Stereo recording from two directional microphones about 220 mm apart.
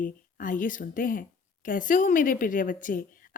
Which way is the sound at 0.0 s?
40° left (ahead or behind).